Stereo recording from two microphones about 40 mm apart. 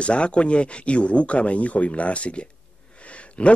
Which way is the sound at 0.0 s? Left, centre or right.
Left.